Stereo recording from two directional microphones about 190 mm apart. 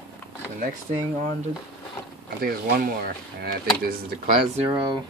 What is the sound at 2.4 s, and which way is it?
Speech, 50° right (ahead or behind).